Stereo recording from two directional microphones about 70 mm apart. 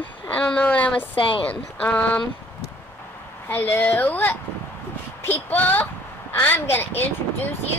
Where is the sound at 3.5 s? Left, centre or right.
Left.